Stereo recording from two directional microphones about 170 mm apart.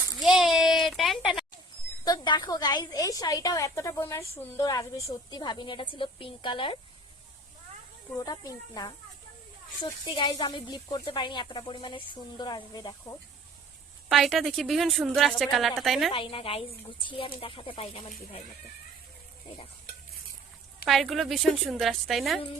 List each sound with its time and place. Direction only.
0.1 s a sound: centre (ahead or behind)
2.0 s a woman's voice: 25° left (ahead or behind)
8.1 s a woman's voice: 20° left (ahead or behind)
14.1 s a woman's voice: centre (ahead or behind)
16.1 s speech: 30° left (ahead or behind)
20.8 s a woman's voice: centre (ahead or behind)